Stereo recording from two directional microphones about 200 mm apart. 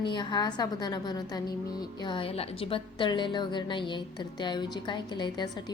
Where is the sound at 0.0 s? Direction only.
20° left (ahead or behind).